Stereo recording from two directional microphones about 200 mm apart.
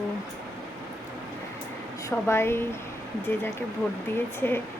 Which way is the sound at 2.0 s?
10° left (ahead or behind).